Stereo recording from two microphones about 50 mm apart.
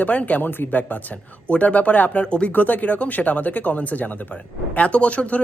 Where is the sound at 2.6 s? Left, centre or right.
Left.